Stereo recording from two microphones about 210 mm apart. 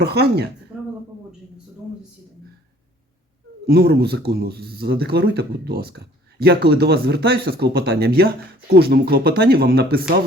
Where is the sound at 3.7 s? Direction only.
50° right (ahead or behind).